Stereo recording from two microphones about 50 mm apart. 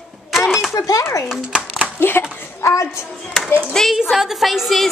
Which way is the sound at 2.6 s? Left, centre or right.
Left.